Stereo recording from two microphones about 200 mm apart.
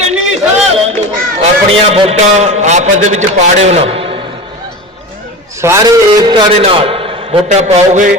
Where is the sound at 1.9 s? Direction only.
30° right (ahead or behind).